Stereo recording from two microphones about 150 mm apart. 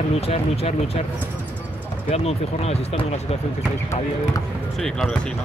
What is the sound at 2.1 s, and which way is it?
Speech, 45° left (ahead or behind).